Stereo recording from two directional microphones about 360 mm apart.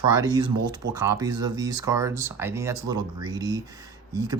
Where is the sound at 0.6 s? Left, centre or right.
Right.